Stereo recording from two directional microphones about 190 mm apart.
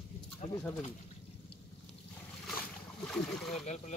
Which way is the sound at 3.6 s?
40° left (ahead or behind).